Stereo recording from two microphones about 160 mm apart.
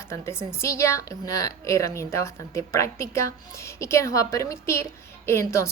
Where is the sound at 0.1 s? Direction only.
15° left (ahead or behind).